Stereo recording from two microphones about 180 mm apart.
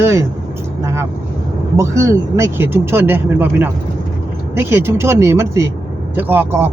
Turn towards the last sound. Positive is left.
turn(degrees=-15)  # may be behind; listen again after turning